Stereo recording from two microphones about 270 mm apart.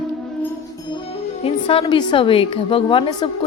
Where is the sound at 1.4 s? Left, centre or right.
Left.